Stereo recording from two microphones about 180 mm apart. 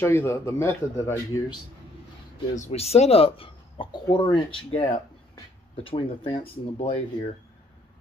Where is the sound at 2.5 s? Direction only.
35° left (ahead or behind).